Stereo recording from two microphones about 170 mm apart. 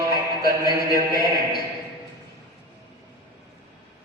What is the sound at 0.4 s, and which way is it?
Music, 65° right (ahead or behind).